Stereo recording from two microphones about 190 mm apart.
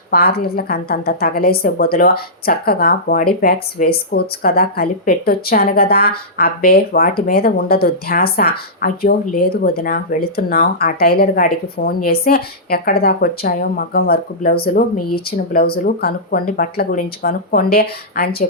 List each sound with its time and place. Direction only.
0.1 s a woman's voice: 55° left (ahead or behind)